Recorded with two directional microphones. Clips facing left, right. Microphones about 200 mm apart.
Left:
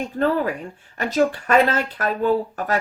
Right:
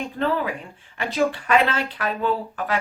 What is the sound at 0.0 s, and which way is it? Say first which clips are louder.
Speech: left 3 dB; 45° left (ahead or behind).